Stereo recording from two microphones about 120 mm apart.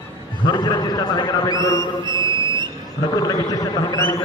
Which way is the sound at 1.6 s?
40° right (ahead or behind).